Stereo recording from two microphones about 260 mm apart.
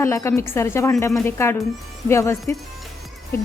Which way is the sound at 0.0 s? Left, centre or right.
Centre.